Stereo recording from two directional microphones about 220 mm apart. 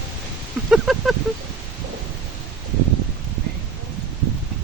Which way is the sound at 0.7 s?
Centre (ahead or behind).